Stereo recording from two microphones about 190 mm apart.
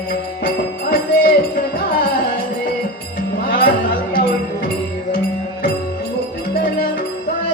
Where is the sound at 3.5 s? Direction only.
50° left (ahead or behind).